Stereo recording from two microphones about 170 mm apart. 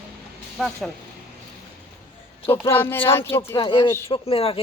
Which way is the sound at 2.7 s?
15° left (ahead or behind).